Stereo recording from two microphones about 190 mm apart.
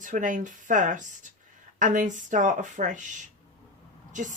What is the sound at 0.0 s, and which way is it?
Speech, 45° right (ahead or behind).